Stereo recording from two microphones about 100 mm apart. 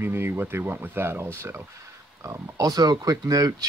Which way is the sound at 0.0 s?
25° right (ahead or behind).